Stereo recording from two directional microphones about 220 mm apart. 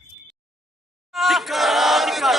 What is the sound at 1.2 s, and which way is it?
Crowd, centre (ahead or behind).